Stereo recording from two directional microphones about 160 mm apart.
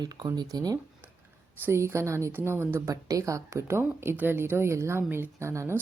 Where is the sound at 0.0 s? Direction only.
25° right (ahead or behind).